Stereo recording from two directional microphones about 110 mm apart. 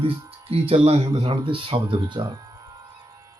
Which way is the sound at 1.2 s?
50° right (ahead or behind).